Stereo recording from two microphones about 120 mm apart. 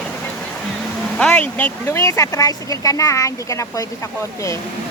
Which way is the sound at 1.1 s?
10° left (ahead or behind).